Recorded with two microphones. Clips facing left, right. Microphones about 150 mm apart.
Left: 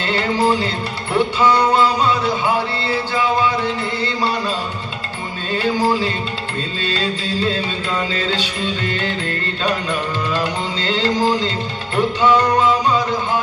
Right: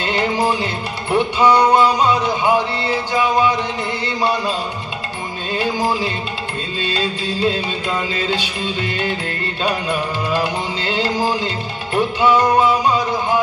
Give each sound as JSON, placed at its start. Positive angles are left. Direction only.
{"t": 0.0, "sound": "music", "side_deg": -15}
{"t": 5.5, "sound": "music", "side_deg": -15}